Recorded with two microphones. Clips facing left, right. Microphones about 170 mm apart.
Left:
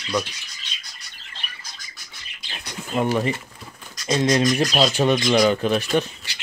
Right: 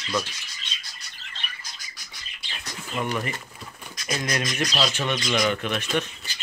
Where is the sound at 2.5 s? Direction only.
35° left (ahead or behind).